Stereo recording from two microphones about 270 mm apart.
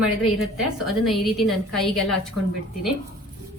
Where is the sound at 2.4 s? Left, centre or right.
Left.